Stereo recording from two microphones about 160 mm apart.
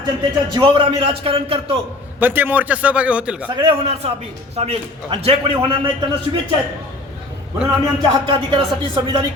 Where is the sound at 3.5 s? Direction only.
35° right (ahead or behind).